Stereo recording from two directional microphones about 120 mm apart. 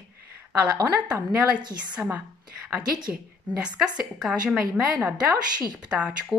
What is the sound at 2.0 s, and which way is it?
Speech, 10° right (ahead or behind).